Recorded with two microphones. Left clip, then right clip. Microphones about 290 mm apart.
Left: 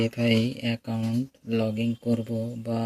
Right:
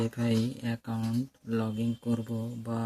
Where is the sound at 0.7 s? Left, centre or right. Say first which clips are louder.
Left 5 dB; centre.